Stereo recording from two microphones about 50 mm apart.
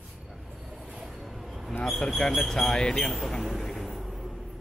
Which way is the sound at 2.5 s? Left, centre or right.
Centre.